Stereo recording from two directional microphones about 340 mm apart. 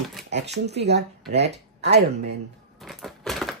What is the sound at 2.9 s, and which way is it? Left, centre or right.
Typewriter, centre.